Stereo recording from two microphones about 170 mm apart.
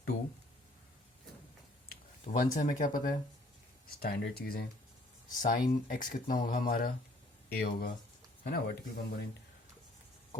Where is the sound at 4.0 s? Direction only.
65° left (ahead or behind).